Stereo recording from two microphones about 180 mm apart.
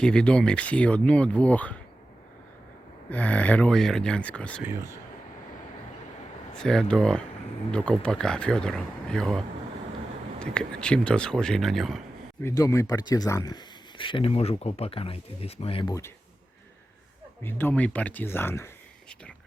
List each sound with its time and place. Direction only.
0.0 s speech: 5° left (ahead or behind)
3.1 s speech: 10° left (ahead or behind)
4.6 s speech: 15° right (ahead or behind)
6.5 s speech: 5° left (ahead or behind)
10.4 s speech: 5° left (ahead or behind)
12.4 s speech: 15° left (ahead or behind)
17.4 s speech: 10° left (ahead or behind)